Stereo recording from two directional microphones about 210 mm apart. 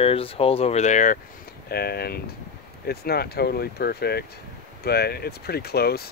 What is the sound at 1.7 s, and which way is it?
Speech, 50° left (ahead or behind).